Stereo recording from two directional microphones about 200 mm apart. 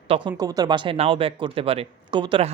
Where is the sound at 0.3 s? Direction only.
20° right (ahead or behind).